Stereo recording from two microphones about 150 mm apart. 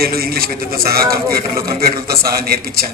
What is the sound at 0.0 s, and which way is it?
Speech, 90° right.